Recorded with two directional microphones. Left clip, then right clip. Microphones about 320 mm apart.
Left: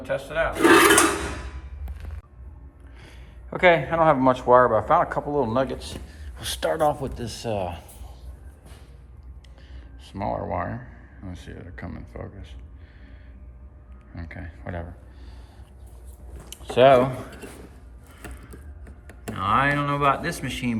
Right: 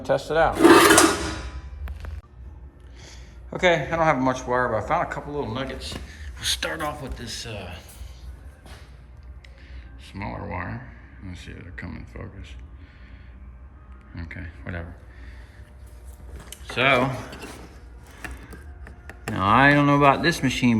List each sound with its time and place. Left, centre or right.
0.0 s speech: centre
0.5 s rub: right
3.0 s speech: centre
7.0 s speech: centre
10.0 s speech: centre
14.3 s speech: centre
16.6 s speech: centre
18.2 s a sound: centre